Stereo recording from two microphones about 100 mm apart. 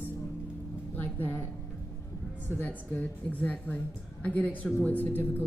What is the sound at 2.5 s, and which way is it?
A woman's voice, 15° left (ahead or behind).